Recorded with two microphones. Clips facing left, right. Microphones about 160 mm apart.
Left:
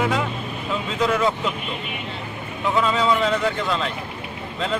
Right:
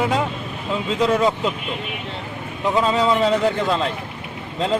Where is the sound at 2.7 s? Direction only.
35° right (ahead or behind).